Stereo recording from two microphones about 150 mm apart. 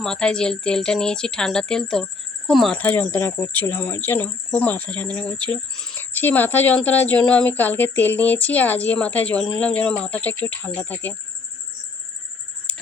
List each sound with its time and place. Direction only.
0.0 s a woman's voice: 5° left (ahead or behind)
2.7 s speech: 10° left (ahead or behind)
12.7 s a sound: 10° left (ahead or behind)